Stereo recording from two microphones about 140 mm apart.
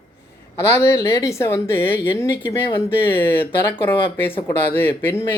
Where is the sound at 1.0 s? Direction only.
20° left (ahead or behind).